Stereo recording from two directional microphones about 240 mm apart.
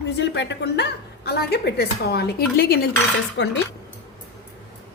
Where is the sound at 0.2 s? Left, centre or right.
Left.